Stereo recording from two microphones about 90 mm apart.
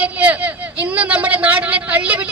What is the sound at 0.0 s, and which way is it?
A man's voice, 15° right (ahead or behind).